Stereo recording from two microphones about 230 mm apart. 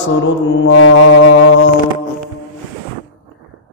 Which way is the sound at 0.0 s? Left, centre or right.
Left.